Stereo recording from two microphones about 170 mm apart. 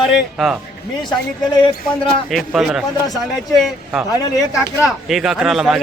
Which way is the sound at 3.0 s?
20° left (ahead or behind).